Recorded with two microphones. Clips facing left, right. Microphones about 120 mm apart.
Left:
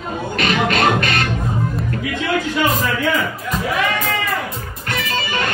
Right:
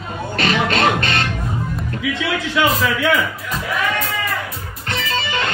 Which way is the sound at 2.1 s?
90° right.